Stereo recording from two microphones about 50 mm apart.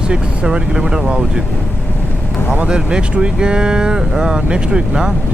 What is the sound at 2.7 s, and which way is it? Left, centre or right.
Speech, centre.